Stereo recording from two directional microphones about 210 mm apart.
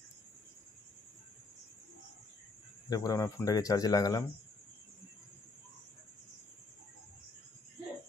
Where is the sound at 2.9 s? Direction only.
15° left (ahead or behind).